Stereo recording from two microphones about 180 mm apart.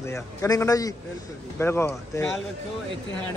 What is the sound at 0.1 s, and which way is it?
A man's voice, 15° left (ahead or behind).